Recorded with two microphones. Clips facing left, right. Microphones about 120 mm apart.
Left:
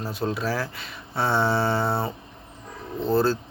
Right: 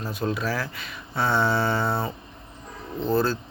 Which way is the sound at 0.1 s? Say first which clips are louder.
Even; 30° left (ahead or behind).